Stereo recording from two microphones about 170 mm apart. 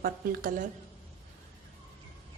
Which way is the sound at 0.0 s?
55° right (ahead or behind).